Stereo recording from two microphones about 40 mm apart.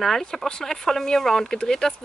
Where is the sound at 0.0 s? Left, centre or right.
Centre.